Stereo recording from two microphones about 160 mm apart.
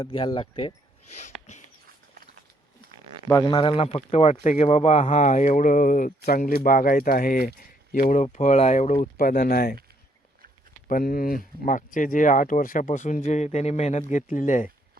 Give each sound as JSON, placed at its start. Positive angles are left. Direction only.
{"t": 0.0, "sound": "speech", "side_deg": 30}
{"t": 1.2, "sound": "a sound", "side_deg": 45}
{"t": 3.2, "sound": "a man's voice", "side_deg": 25}
{"t": 9.1, "sound": "speech", "side_deg": 65}
{"t": 10.8, "sound": "a man's voice", "side_deg": 60}